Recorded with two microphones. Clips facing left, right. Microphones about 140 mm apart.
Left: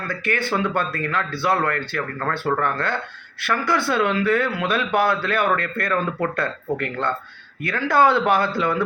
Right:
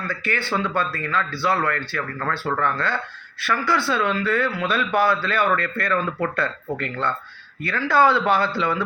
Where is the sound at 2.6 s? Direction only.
55° left (ahead or behind).